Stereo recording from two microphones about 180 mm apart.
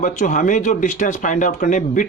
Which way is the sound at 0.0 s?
45° left (ahead or behind).